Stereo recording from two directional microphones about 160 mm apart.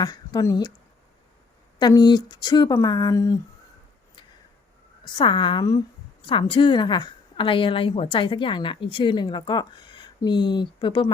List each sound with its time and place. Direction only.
0.0 s speech: 25° left (ahead or behind)
1.8 s speech: 25° left (ahead or behind)
5.0 s a woman's voice: 30° left (ahead or behind)